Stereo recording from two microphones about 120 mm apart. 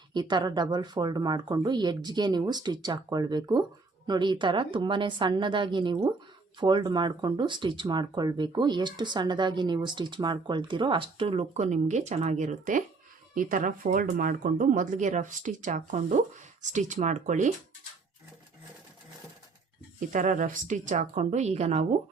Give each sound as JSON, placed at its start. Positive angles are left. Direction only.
{"t": 0.1, "sound": "speech", "side_deg": -40}
{"t": 20.1, "sound": "a woman's voice", "side_deg": -90}